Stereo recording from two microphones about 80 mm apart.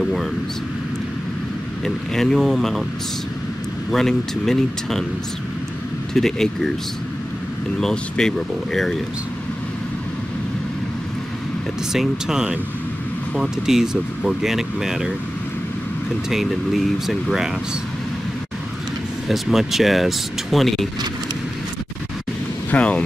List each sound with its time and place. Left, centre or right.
0.0 s speech: centre
2.1 s speech: centre
3.9 s speech: centre
6.1 s speech: centre
7.8 s speech: centre
11.9 s speech: centre
16.3 s speech: centre
19.2 s speech: centre
22.7 s speech: centre